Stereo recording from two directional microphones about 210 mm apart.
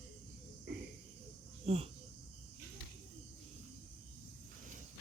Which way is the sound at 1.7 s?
30° right (ahead or behind).